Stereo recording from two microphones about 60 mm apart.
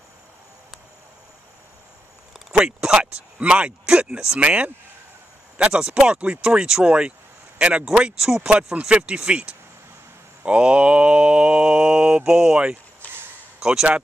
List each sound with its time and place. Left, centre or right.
2.5 s speech: centre
7.8 s speech: centre
10.4 s mantra: centre
12.2 s speech: centre
13.0 s a sound: left
13.6 s speech: centre